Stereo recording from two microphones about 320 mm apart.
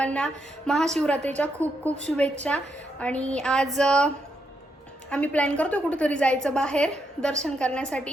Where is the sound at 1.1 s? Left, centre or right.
Right.